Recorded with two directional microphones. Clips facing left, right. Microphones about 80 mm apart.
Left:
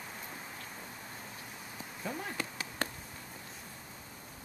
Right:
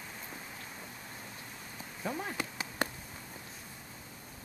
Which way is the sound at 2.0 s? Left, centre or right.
Centre.